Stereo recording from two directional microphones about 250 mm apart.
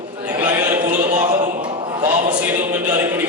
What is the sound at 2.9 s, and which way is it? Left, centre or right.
Music, centre.